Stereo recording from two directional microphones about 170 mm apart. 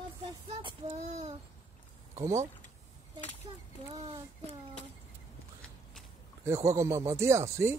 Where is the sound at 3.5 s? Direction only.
30° right (ahead or behind).